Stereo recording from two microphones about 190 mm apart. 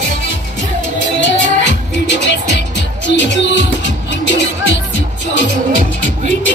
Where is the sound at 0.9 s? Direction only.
70° left (ahead or behind).